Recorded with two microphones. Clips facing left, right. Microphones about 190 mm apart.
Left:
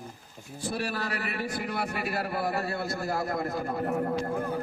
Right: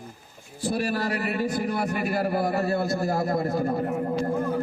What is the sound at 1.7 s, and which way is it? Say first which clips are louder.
Speech: right 5 dB; 45° right (ahead or behind).